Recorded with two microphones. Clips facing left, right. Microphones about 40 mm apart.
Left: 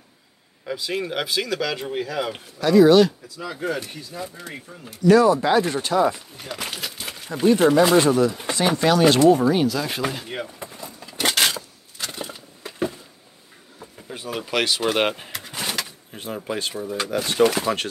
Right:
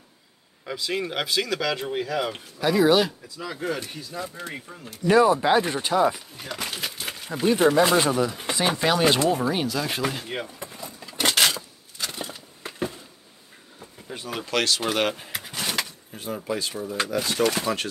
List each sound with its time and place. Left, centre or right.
0.7 s speech: centre
3.4 s speech: centre
5.0 s speech: centre
6.0 s speech: centre
9.3 s a sound: centre
13.7 s speech: centre
15.0 s speech: left
16.4 s speech: left
17.1 s speech: left